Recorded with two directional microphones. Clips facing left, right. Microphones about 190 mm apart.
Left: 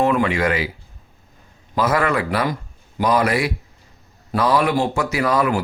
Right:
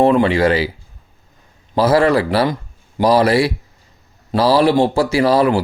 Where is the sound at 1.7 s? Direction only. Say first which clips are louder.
Right 6 dB; 30° right (ahead or behind).